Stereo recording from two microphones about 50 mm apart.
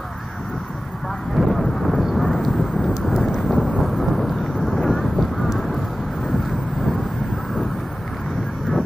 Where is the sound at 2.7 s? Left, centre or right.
Centre.